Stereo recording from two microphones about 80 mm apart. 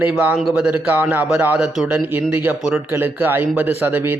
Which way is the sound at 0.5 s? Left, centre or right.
Centre.